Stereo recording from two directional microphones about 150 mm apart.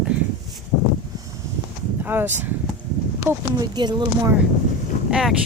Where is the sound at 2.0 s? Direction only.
15° right (ahead or behind).